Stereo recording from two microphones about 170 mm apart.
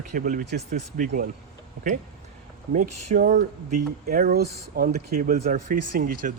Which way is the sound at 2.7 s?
50° right (ahead or behind).